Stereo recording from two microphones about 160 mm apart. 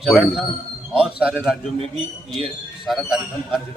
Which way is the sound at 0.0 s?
Centre (ahead or behind).